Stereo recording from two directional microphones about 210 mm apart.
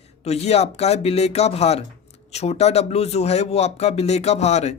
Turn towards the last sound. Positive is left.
turn(degrees=30)  # may be behind; listen again after turning